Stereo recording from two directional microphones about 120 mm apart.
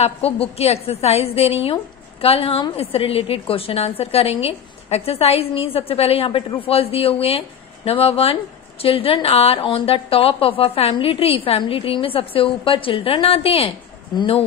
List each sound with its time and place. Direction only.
0.0 s a woman's voice: 55° left (ahead or behind)